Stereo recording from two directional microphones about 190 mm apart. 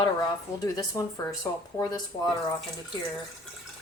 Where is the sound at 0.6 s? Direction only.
20° left (ahead or behind).